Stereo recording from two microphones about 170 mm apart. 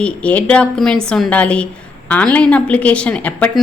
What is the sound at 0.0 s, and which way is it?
A woman's voice, 10° left (ahead or behind).